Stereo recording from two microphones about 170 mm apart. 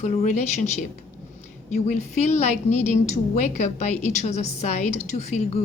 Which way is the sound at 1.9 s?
40° left (ahead or behind).